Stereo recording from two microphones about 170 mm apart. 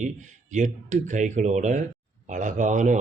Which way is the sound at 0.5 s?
45° right (ahead or behind).